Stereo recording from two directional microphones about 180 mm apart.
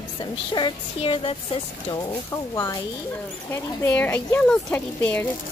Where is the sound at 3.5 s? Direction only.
10° left (ahead or behind).